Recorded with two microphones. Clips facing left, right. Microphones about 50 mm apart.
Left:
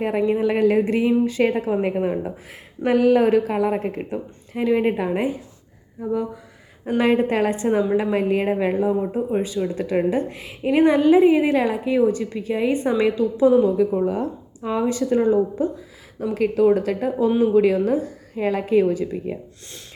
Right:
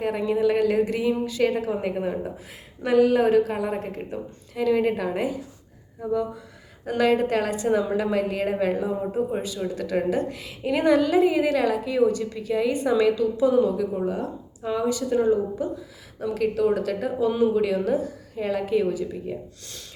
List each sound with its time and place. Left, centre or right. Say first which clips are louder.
0.0 s a woman's voice: left 2 dB; left
2.8 s a woman's voice: left 2 dB; left
6.8 s a woman's voice: left 2 dB; left